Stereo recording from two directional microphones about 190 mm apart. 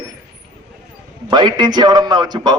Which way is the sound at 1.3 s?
25° right (ahead or behind).